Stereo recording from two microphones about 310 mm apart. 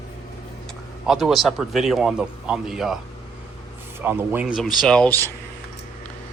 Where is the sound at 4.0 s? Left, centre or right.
Centre.